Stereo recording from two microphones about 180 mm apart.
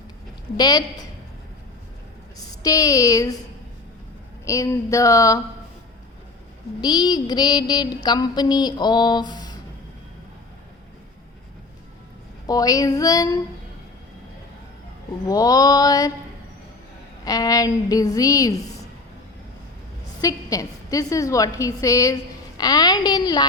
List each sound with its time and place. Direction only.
0.5 s a woman's voice: 20° left (ahead or behind)
2.5 s a woman's voice: 20° left (ahead or behind)
4.4 s speech: 15° left (ahead or behind)
6.8 s a woman's voice: 25° left (ahead or behind)
12.5 s a woman's voice: 20° left (ahead or behind)
15.3 s a woman's voice: 20° left (ahead or behind)
17.2 s a woman's voice: 20° left (ahead or behind)
20.2 s a woman's voice: 20° left (ahead or behind)